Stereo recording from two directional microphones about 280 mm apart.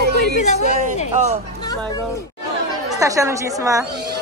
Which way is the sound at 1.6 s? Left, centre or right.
Centre.